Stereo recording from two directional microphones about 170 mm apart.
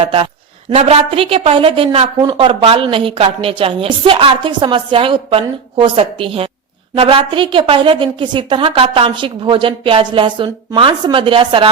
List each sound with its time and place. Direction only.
0.0 s a woman's voice: 35° right (ahead or behind)